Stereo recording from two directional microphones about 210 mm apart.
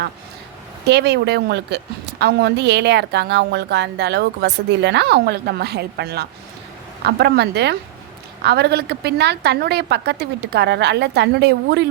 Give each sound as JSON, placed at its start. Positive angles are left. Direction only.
{"t": 0.9, "sound": "a woman's voice", "side_deg": -50}